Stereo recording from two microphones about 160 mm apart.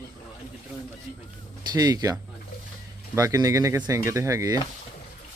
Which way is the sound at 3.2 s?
20° right (ahead or behind).